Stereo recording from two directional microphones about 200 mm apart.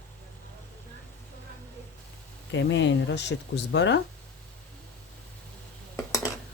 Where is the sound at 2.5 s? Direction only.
65° left (ahead or behind).